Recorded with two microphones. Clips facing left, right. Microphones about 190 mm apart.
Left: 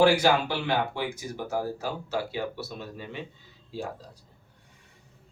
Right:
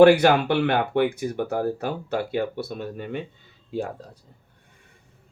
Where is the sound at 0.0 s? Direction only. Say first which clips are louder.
Right 7 dB; 60° right (ahead or behind).